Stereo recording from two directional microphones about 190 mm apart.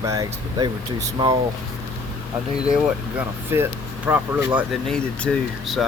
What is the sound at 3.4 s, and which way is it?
Speech, 10° right (ahead or behind).